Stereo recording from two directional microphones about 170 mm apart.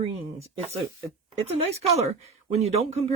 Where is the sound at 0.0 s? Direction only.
35° right (ahead or behind).